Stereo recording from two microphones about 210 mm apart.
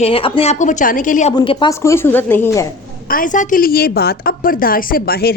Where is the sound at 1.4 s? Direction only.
20° left (ahead or behind).